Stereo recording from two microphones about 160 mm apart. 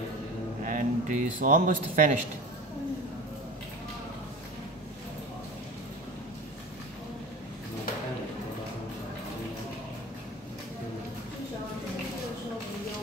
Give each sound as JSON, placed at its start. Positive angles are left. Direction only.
{"t": 0.7, "sound": "speech", "side_deg": -50}